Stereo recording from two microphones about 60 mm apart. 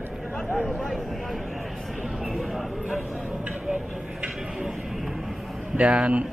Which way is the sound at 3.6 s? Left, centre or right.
Centre.